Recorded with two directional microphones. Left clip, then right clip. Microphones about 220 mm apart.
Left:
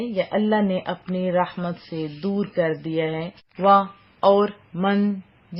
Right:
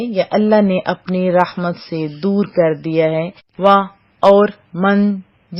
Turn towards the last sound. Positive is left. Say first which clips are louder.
# right 7 dB
turn(degrees=-20)  # may be behind; listen again after turning